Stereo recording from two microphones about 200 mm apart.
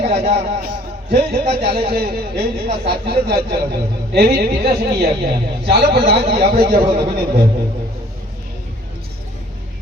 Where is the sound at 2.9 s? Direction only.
50° right (ahead or behind).